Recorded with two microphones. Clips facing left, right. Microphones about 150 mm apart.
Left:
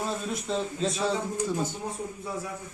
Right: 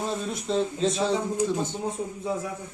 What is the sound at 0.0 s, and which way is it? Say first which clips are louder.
Speech: right 2 dB; centre (ahead or behind).